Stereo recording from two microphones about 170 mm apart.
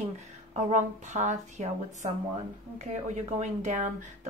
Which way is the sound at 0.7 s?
45° right (ahead or behind).